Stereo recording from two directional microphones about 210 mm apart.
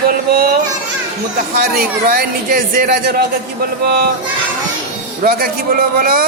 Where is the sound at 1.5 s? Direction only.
45° right (ahead or behind).